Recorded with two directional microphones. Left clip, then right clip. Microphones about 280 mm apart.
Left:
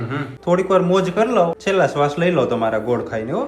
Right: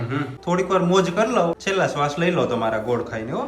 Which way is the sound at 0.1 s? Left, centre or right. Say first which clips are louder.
Left 5 dB; centre.